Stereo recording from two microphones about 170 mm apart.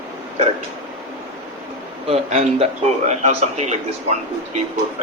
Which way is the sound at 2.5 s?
40° right (ahead or behind).